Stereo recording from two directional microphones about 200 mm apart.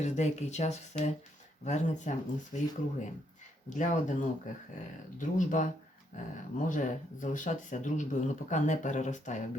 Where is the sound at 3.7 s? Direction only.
40° left (ahead or behind).